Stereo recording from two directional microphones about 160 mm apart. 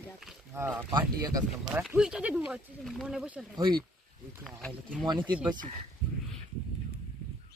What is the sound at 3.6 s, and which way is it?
Speech, 30° right (ahead or behind).